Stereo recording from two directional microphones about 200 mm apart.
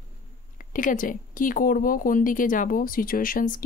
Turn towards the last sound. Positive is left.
turn(degrees=45)  # may be behind; listen again after turning